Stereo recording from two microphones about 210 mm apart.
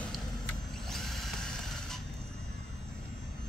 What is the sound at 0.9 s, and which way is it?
Drill, centre (ahead or behind).